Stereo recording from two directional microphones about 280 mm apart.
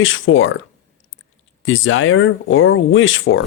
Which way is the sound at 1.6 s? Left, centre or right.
Left.